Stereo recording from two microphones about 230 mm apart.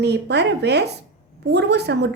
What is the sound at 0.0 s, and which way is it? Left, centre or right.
A woman's voice, right.